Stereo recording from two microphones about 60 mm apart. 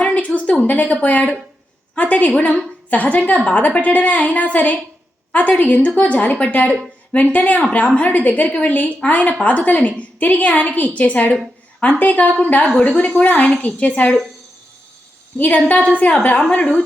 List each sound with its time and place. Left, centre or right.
0.0 s a sound: left
0.3 s a woman's voice: left
15.4 s a woman's voice: left